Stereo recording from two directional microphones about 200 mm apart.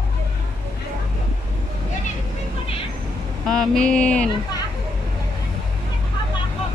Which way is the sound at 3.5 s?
5° left (ahead or behind).